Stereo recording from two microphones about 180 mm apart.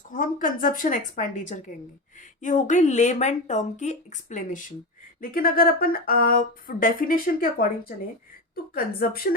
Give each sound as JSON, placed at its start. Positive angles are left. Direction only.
{"t": 0.1, "sound": "speech", "side_deg": 50}
{"t": 5.2, "sound": "speech", "side_deg": 55}